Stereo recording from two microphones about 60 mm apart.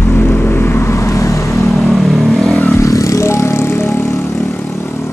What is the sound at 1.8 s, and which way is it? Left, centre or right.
Vehicle, centre.